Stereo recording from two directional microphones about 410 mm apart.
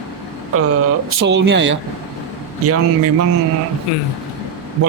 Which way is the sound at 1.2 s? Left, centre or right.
Right.